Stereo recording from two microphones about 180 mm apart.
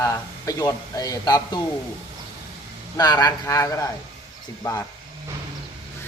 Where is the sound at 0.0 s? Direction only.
20° left (ahead or behind).